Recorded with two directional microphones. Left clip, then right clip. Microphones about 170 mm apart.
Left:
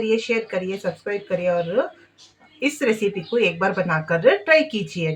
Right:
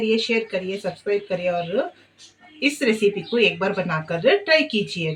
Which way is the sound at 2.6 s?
10° left (ahead or behind).